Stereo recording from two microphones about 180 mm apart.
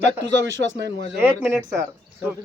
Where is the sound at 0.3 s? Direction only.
80° right.